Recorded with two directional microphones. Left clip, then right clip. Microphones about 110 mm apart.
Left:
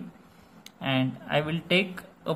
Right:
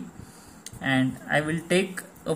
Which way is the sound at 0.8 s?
20° left (ahead or behind).